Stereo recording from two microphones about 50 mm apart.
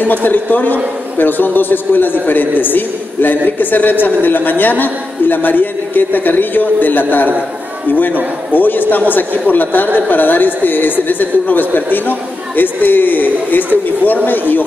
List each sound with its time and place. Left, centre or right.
0.0 s a man's voice: left